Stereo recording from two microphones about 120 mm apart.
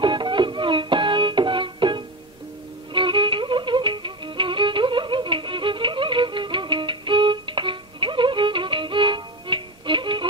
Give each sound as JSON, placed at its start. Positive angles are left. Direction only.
{"t": 0.0, "sound": "music", "side_deg": -40}
{"t": 2.9, "sound": "violin", "side_deg": -45}